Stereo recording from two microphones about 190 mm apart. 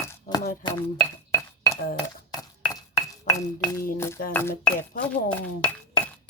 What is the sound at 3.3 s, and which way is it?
Speech, 15° left (ahead or behind).